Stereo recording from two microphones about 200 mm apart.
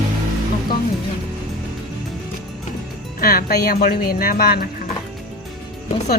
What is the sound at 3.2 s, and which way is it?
Speech, 50° left (ahead or behind).